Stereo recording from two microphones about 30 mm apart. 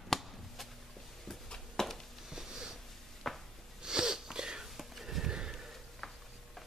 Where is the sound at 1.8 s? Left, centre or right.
Centre.